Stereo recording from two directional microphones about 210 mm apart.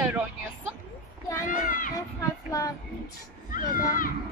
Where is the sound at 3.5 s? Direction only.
40° left (ahead or behind).